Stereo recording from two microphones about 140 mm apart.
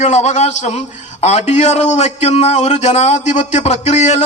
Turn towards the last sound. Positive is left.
turn(degrees=55)  # may be behind; listen again after turning